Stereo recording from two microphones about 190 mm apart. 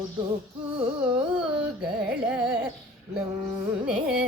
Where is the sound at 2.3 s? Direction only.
5° right (ahead or behind).